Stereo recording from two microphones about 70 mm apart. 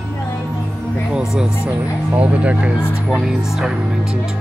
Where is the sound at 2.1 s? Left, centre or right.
Centre.